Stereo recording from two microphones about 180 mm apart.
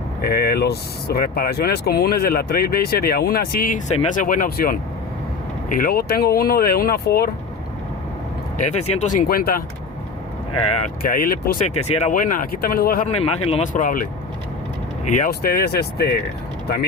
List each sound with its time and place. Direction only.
0.2 s speech: 55° left (ahead or behind)
8.6 s speech: 40° left (ahead or behind); by 9.6 s 55° left (ahead or behind)
11.0 s speech: 55° left (ahead or behind)
11.7 s speech: 35° left (ahead or behind)
12.2 s speech: 50° left (ahead or behind)
13.1 s speech: 35° left (ahead or behind)
15.3 s speech: 60° left (ahead or behind)